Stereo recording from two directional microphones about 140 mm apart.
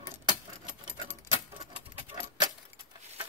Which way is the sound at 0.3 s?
30° right (ahead or behind).